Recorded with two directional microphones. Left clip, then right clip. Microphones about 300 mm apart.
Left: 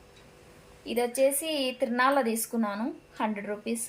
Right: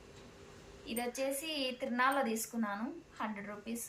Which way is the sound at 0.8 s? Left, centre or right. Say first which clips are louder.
Left 12 dB; left.